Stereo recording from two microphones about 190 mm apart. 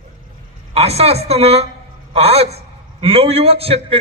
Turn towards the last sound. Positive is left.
turn(degrees=-30)  # may be behind; listen again after turning